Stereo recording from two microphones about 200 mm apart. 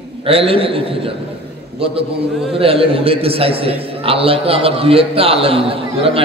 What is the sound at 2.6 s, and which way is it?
A man's voice, 30° right (ahead or behind).